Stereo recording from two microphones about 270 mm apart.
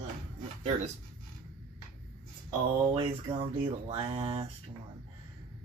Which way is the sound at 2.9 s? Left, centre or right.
Centre.